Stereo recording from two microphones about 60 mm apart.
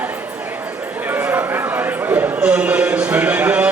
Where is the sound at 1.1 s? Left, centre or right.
Right.